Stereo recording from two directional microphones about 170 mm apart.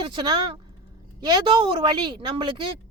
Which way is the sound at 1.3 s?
30° right (ahead or behind).